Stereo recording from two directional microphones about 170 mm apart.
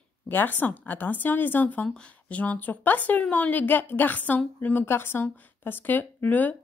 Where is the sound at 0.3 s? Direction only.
10° left (ahead or behind).